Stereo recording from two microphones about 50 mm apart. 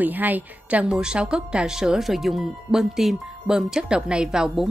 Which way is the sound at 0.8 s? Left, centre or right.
Centre.